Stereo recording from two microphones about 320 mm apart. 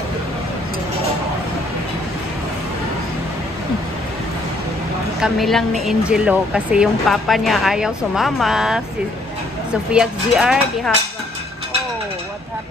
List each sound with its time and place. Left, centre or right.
5.2 s speech: centre
9.8 s speech: centre